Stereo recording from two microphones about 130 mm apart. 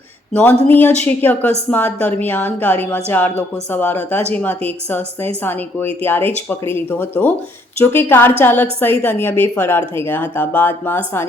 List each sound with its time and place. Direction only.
0.3 s a woman's voice: 15° left (ahead or behind)